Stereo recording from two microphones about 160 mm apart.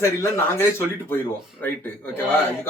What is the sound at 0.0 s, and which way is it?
Speech, 15° left (ahead or behind).